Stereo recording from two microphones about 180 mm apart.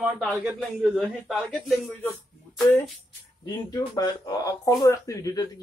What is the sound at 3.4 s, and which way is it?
Speech, 20° left (ahead or behind).